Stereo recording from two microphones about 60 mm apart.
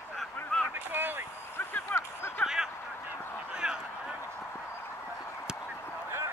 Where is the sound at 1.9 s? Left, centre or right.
Left.